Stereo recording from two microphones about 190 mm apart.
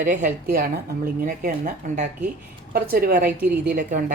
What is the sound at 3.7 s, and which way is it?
Speech, 45° right (ahead or behind).